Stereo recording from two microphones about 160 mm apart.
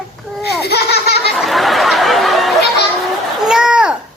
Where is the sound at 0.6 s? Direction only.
90° left.